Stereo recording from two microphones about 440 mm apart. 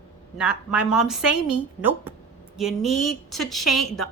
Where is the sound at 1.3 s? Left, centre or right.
Left.